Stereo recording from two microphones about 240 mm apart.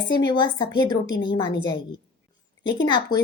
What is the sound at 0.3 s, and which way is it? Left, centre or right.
Speech, centre.